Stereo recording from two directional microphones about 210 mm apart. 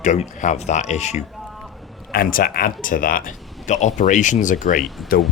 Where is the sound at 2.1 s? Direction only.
45° left (ahead or behind).